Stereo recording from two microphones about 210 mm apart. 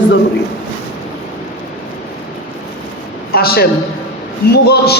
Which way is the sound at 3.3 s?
45° left (ahead or behind).